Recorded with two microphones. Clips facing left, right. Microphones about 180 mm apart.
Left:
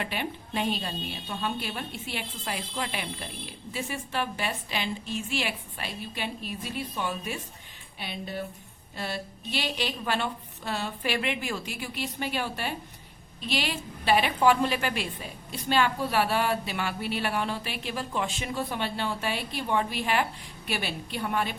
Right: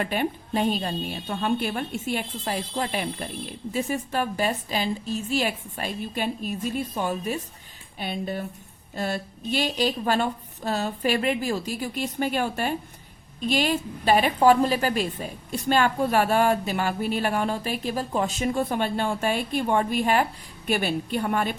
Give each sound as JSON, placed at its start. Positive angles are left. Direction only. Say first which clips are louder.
{"t": 0.0, "sound": "a woman's voice", "louder": "right 7 dB", "side_deg": -45}